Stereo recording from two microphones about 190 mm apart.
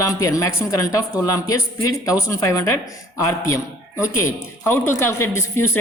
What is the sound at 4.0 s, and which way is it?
Speech, 15° left (ahead or behind).